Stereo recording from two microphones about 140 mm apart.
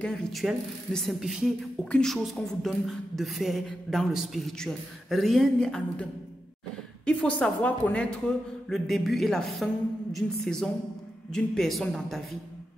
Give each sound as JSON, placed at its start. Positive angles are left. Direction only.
{"t": 0.0, "sound": "speech", "side_deg": 0}
{"t": 7.1, "sound": "a woman's voice", "side_deg": 5}